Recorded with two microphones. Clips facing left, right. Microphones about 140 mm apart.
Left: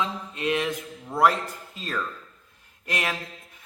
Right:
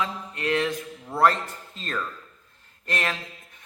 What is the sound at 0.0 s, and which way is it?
A man's voice, 20° left (ahead or behind).